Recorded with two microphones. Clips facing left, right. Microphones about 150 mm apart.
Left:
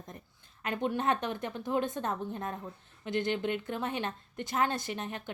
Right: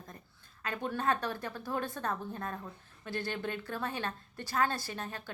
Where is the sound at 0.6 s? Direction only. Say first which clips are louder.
Left 3 dB; 20° left (ahead or behind).